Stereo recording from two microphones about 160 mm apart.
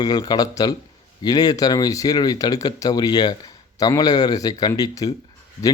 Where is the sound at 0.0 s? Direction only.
25° left (ahead or behind).